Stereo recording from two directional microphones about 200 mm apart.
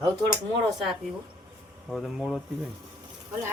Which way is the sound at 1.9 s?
Centre (ahead or behind).